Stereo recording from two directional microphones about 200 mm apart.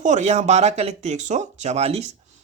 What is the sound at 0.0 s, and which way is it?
Speech, 35° right (ahead or behind).